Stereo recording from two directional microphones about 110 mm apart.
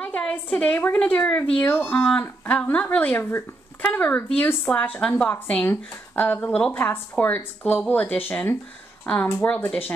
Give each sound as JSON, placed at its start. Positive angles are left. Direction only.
{"t": 0.0, "sound": "speech", "side_deg": 10}